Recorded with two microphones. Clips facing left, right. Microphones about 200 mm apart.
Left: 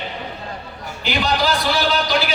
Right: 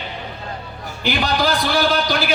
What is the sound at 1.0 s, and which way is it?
A man's voice, 55° right (ahead or behind).